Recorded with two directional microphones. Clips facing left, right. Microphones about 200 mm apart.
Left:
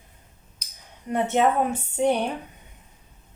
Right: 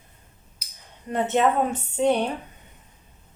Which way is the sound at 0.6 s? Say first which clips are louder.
Even; 5° right (ahead or behind).